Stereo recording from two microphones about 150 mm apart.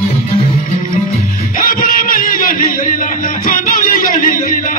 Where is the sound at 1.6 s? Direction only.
70° left (ahead or behind).